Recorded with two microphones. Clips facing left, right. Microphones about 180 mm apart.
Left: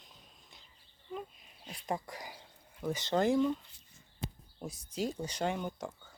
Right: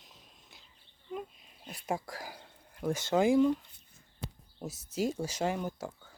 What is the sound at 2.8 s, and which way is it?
Speech, 10° right (ahead or behind).